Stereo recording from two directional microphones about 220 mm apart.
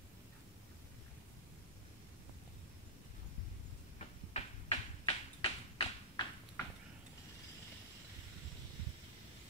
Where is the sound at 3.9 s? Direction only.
25° left (ahead or behind).